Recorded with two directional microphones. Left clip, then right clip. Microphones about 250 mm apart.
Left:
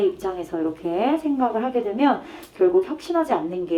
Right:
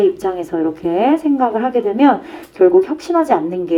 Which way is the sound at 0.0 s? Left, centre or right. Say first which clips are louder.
Right 8 dB; right.